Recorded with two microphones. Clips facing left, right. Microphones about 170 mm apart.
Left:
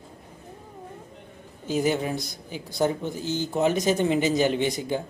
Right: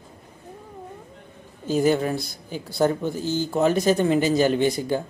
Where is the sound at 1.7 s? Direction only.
15° left (ahead or behind).